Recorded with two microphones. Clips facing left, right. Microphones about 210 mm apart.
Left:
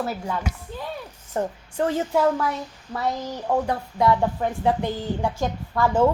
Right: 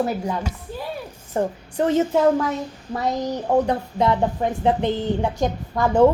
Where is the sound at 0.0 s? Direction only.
20° right (ahead or behind).